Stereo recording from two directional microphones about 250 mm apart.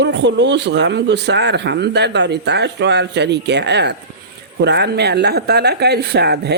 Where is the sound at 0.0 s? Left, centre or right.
Right.